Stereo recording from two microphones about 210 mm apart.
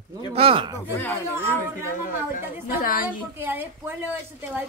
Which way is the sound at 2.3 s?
40° left (ahead or behind).